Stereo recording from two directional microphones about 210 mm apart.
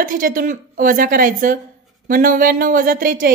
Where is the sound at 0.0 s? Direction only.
40° right (ahead or behind).